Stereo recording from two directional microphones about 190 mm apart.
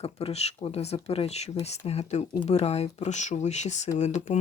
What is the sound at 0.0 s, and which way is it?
Speech, 30° left (ahead or behind).